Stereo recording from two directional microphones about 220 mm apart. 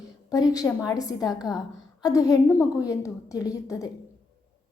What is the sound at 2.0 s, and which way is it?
A woman's voice, 15° left (ahead or behind).